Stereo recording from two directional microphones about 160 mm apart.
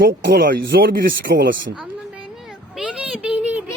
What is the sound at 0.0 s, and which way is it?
Speech, 80° right.